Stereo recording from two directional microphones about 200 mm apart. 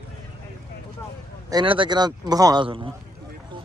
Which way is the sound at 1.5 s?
25° right (ahead or behind).